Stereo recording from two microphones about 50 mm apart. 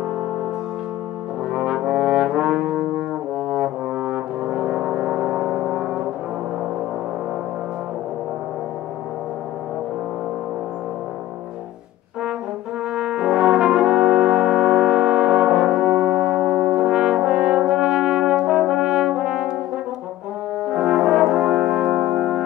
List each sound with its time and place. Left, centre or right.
1.5 s brass instrument: centre
12.9 s brass instrument: centre
20.6 s brass instrument: centre